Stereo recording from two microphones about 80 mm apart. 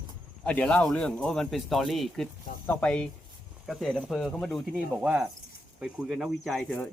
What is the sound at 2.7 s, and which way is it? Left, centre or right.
Speech, centre.